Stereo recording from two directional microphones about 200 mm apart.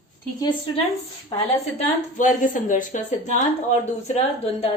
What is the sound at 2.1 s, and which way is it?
Speech, 40° left (ahead or behind).